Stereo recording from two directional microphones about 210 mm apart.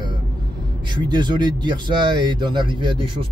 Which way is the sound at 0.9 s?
20° right (ahead or behind).